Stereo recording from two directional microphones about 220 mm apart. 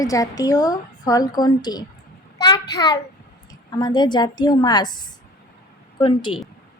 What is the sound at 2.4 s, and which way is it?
Child singing, 20° left (ahead or behind).